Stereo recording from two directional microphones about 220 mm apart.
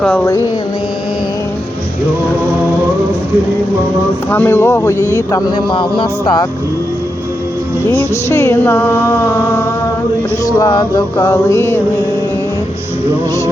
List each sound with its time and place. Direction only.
0.0 s music: 10° left (ahead or behind)
4.3 s music: 10° left (ahead or behind)
5.1 s speech: 20° left (ahead or behind)
7.9 s music: 10° left (ahead or behind)
10.6 s music: 20° left (ahead or behind)